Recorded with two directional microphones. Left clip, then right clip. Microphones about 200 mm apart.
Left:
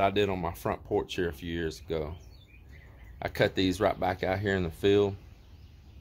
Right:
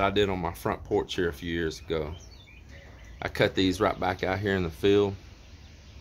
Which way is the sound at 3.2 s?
15° left (ahead or behind).